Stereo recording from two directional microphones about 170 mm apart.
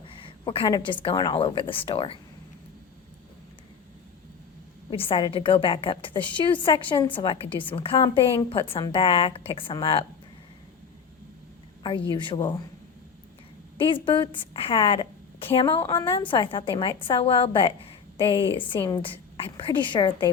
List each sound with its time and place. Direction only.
0.2 s a woman's voice: 30° left (ahead or behind)
5.0 s a woman's voice: 30° left (ahead or behind)
11.8 s a woman's voice: 25° left (ahead or behind)
13.7 s a woman's voice: 30° left (ahead or behind)